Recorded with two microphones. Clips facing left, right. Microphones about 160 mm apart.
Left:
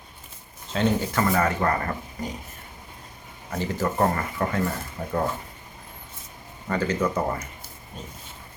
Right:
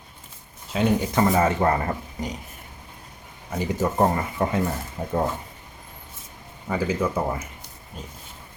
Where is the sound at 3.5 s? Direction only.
15° right (ahead or behind).